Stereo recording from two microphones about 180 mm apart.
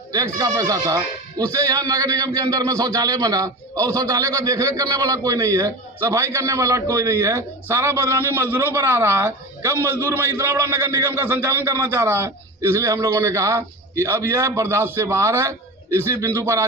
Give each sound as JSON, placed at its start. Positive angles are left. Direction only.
{"t": 0.3, "sound": "speech", "side_deg": -20}